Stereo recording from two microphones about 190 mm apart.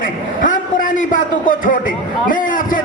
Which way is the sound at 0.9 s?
45° left (ahead or behind).